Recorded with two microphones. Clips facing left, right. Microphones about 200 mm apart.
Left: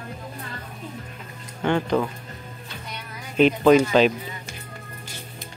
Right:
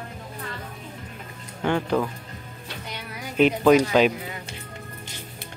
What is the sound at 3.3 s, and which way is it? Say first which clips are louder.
Speech: left 1 dB; 5° right (ahead or behind).